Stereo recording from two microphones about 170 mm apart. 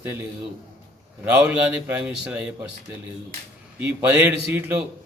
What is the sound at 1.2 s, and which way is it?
A man's voice, 10° right (ahead or behind).